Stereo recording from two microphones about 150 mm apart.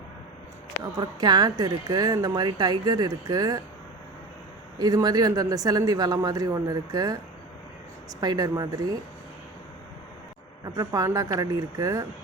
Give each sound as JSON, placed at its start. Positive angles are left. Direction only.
{"t": 0.9, "sound": "a woman's voice", "side_deg": -30}
{"t": 4.8, "sound": "a woman's voice", "side_deg": -25}
{"t": 8.2, "sound": "a woman's voice", "side_deg": -25}
{"t": 10.8, "sound": "a woman's voice", "side_deg": -20}